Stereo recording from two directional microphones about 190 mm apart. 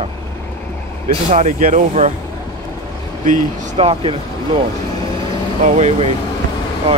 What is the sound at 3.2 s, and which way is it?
Speech, 40° right (ahead or behind).